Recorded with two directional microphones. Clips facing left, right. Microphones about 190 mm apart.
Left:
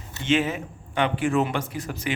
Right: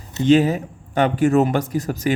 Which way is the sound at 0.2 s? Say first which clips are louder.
Right 8 dB; 40° right (ahead or behind).